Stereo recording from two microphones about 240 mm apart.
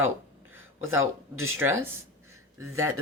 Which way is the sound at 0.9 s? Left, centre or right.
Right.